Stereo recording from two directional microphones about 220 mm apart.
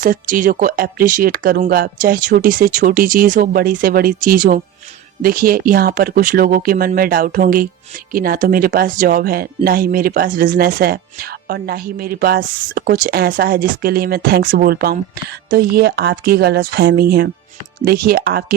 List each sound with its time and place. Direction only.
0.0 s speech: 40° right (ahead or behind)